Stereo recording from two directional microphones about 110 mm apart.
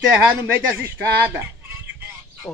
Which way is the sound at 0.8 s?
20° right (ahead or behind).